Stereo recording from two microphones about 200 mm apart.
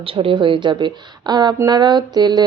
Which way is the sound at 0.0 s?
25° right (ahead or behind).